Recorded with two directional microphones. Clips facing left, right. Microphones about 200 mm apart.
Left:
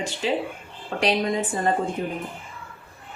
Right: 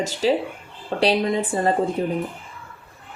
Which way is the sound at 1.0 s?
30° right (ahead or behind).